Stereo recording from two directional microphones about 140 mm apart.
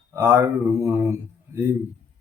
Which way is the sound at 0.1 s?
20° right (ahead or behind).